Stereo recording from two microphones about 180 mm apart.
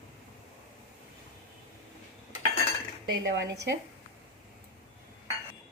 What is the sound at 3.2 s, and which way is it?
Speech, 75° right (ahead or behind).